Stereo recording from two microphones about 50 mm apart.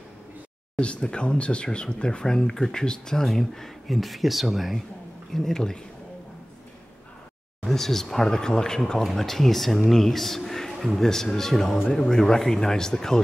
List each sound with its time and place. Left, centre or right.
0.7 s speech: left; by 4.8 s centre
5.3 s speech: centre
7.6 s speech: centre